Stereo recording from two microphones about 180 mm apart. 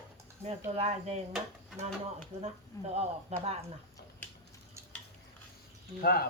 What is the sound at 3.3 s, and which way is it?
Speech, 35° right (ahead or behind).